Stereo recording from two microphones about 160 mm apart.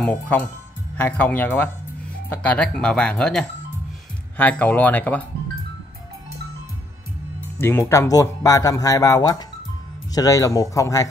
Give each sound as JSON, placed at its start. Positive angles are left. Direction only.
{"t": 0.0, "sound": "speech", "side_deg": 10}
{"t": 7.6, "sound": "speech", "side_deg": 15}